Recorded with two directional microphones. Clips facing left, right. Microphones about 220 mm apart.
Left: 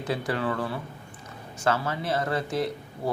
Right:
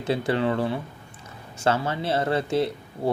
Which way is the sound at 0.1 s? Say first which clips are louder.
Right 5 dB; 25° right (ahead or behind).